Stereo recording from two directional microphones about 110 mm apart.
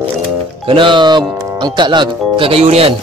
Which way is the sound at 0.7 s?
50° right (ahead or behind).